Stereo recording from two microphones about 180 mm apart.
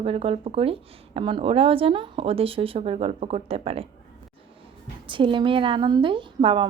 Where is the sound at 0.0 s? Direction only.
30° right (ahead or behind).